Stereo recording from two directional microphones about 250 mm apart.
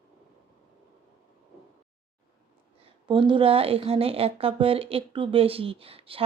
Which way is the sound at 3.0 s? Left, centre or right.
Centre.